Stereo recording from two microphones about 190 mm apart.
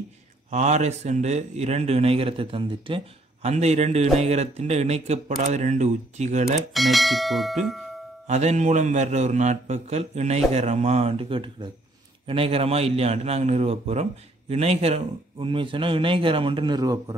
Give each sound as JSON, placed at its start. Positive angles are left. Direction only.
{"t": 0.5, "sound": "a man's voice", "side_deg": -40}
{"t": 6.7, "sound": "speech", "side_deg": 0}
{"t": 8.3, "sound": "a man's voice", "side_deg": -35}